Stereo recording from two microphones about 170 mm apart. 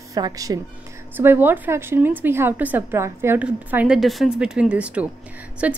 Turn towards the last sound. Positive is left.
turn(degrees=-10)  # may be behind; listen again after turning